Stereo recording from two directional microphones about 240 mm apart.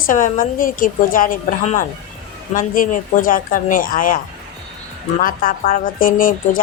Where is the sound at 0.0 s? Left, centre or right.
Left.